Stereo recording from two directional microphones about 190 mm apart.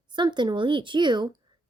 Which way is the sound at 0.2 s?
25° right (ahead or behind).